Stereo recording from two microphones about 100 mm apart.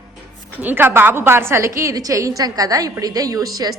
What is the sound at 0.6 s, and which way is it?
A woman's voice, 20° right (ahead or behind).